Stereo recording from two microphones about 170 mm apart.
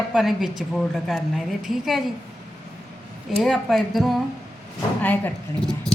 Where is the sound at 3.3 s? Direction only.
Centre (ahead or behind).